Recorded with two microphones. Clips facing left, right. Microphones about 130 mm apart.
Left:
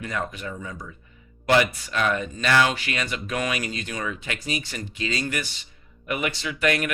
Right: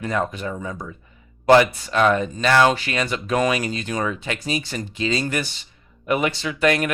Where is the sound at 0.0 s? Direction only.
35° right (ahead or behind).